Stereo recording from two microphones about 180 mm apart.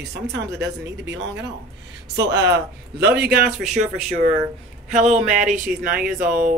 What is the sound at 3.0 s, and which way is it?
Speech, 60° right (ahead or behind).